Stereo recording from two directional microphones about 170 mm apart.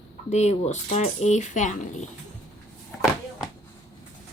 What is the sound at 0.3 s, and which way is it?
Speech, 40° left (ahead or behind).